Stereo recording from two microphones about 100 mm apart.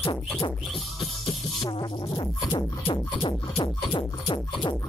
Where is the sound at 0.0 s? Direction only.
60° left (ahead or behind).